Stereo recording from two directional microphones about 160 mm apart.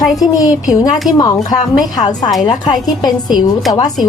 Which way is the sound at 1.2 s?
25° left (ahead or behind).